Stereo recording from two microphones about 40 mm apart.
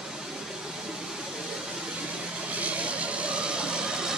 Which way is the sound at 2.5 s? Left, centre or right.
Right.